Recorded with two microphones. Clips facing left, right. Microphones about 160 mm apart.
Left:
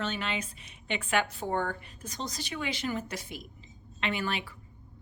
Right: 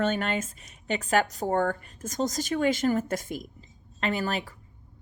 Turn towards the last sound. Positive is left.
turn(degrees=-40)  # may be behind; listen again after turning